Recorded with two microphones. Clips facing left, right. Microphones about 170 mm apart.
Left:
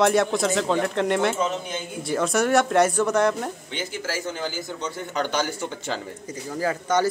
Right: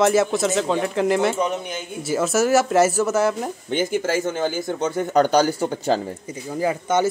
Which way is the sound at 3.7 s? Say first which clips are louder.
Right 14 dB; 50° right (ahead or behind).